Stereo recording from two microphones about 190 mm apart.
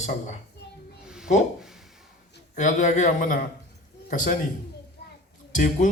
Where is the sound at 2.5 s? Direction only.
40° left (ahead or behind).